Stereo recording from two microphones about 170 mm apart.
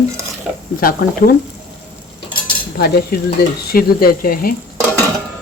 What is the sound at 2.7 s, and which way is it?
Cutlery, 70° left (ahead or behind).